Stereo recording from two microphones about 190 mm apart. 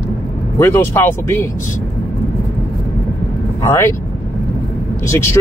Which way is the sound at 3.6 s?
15° left (ahead or behind).